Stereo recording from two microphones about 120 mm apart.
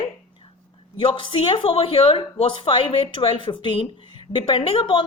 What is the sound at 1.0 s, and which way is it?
A woman's voice, 45° left (ahead or behind).